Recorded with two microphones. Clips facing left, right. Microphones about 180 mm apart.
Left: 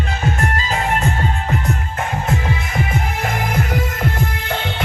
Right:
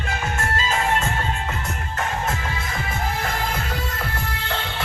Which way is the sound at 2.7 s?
20° left (ahead or behind).